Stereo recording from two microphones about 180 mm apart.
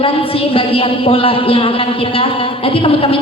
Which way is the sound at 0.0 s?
30° left (ahead or behind).